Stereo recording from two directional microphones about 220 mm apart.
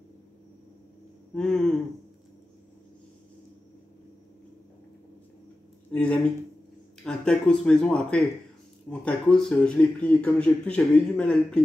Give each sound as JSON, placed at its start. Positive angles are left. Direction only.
{"t": 1.3, "sound": "speech", "side_deg": 0}
{"t": 5.9, "sound": "speech", "side_deg": 5}